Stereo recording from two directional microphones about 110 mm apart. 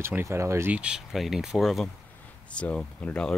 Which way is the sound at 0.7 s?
10° right (ahead or behind).